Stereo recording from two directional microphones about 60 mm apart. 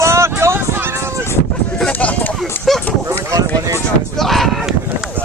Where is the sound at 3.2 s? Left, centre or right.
Right.